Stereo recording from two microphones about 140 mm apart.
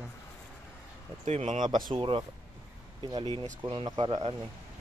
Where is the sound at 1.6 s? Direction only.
35° right (ahead or behind).